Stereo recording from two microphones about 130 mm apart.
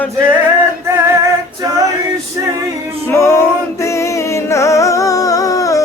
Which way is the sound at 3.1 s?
20° left (ahead or behind).